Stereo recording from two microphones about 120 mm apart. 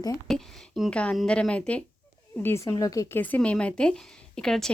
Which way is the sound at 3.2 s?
10° left (ahead or behind).